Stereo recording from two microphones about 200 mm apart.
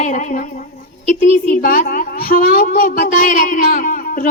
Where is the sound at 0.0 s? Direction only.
40° left (ahead or behind).